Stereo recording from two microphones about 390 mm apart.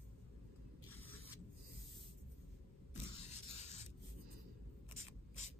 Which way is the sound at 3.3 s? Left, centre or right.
Centre.